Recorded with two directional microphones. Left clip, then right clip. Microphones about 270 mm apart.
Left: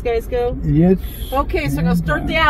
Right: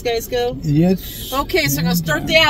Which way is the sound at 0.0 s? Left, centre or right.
Right.